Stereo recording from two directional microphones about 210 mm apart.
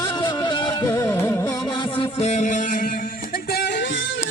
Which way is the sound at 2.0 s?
30° left (ahead or behind).